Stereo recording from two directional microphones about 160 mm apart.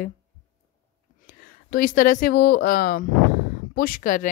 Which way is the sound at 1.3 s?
65° left (ahead or behind).